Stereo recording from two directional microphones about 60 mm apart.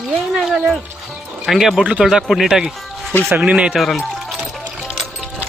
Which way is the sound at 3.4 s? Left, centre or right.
Right.